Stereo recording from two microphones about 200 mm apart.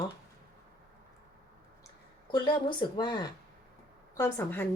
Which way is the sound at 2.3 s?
25° left (ahead or behind).